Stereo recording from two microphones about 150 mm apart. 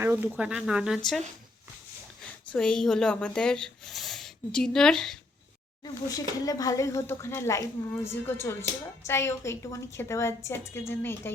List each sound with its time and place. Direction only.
0.0 s speech: 15° right (ahead or behind)
2.5 s speech: 5° left (ahead or behind)
5.8 s speech: 25° left (ahead or behind)